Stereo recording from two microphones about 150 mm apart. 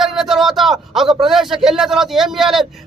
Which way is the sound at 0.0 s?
Centre (ahead or behind).